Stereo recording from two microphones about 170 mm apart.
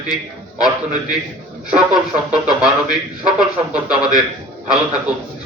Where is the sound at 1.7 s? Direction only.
5° right (ahead or behind).